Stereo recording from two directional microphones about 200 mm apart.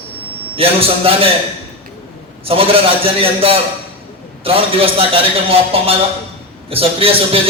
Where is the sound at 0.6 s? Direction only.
30° right (ahead or behind).